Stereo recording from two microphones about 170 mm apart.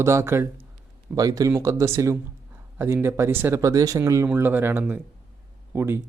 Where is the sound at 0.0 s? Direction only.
15° right (ahead or behind).